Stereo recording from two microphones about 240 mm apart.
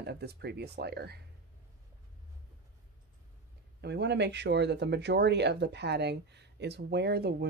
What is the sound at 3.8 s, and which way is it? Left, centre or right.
Speech, right.